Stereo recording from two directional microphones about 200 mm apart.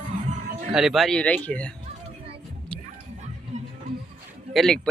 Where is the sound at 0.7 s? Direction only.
Centre (ahead or behind).